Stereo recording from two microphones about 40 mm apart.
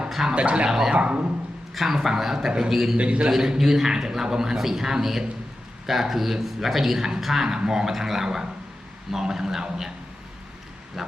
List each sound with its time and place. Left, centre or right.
0.1 s a sound: centre
0.3 s speech: right
0.7 s a man's voice: centre
0.9 s speech: right
1.7 s a man's voice: centre
3.0 s speech: right
3.2 s a man's voice: centre
11.0 s a man's voice: centre